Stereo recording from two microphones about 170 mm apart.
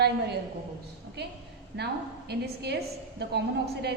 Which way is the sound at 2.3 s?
75° right (ahead or behind).